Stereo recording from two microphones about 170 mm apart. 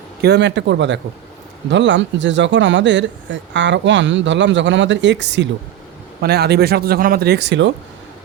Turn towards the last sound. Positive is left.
turn(degrees=-90)